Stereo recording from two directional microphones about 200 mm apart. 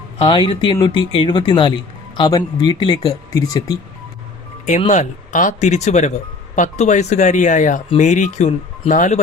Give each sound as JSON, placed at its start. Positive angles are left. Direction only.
{"t": 0.2, "sound": "speech", "side_deg": 25}
{"t": 4.8, "sound": "speech", "side_deg": 35}